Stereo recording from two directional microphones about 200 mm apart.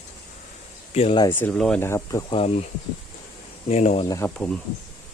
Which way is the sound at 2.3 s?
30° left (ahead or behind).